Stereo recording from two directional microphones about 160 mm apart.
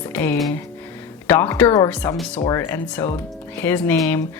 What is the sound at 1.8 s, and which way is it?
A woman's voice, 10° left (ahead or behind).